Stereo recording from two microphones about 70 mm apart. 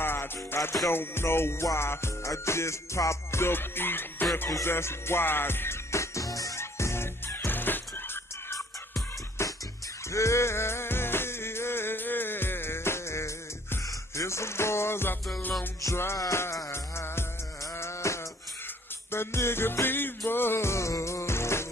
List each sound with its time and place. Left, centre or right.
0.0 s music: left
4.3 s music: left
6.6 s music: left
8.5 s music: left
16.7 s music: left